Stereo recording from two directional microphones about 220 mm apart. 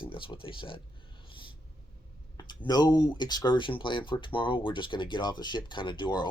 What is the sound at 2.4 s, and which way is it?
Speech, 20° left (ahead or behind).